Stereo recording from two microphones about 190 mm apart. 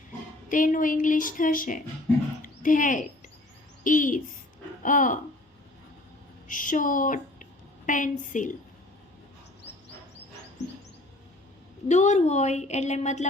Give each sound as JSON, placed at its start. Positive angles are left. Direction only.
{"t": 0.4, "sound": "a woman's voice", "side_deg": 45}
{"t": 2.4, "sound": "a sound", "side_deg": 45}
{"t": 3.8, "sound": "a woman's voice", "side_deg": 45}
{"t": 6.5, "sound": "a woman's voice", "side_deg": 45}
{"t": 10.6, "sound": "music", "side_deg": 35}
{"t": 11.9, "sound": "a woman's voice", "side_deg": 35}